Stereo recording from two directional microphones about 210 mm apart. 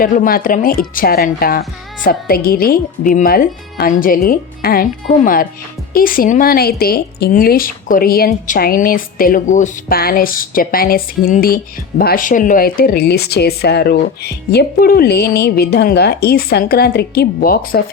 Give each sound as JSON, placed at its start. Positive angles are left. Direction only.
{"t": 0.0, "sound": "speech", "side_deg": 45}